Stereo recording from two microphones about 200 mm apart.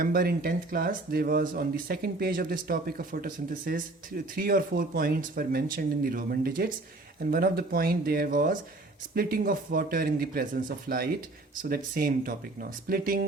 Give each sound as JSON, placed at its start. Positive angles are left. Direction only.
{"t": 0.0, "sound": "speech", "side_deg": -45}